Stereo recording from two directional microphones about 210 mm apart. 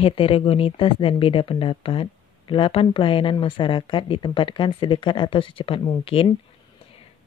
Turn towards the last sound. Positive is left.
turn(degrees=25)  # may be behind; listen again after turning